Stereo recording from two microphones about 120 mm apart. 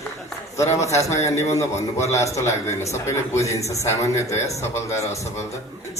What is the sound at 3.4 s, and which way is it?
A man's voice, 25° left (ahead or behind).